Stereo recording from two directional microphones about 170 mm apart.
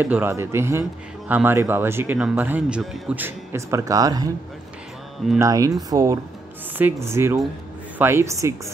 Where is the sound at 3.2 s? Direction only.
15° right (ahead or behind).